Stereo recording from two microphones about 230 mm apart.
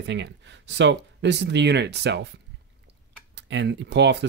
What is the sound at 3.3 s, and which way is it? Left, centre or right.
Speech, right.